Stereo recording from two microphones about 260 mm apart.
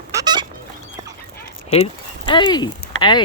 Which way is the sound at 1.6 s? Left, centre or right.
Left.